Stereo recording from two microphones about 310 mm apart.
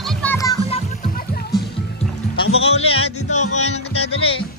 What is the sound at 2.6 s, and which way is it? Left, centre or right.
Music, centre.